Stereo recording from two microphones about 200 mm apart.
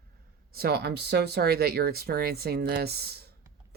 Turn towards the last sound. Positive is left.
turn(degrees=-55)  # may be behind; listen again after turning